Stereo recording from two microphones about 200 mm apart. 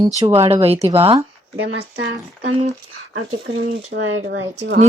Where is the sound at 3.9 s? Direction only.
55° right (ahead or behind).